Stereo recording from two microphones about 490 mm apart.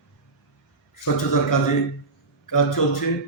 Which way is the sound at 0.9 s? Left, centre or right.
Left.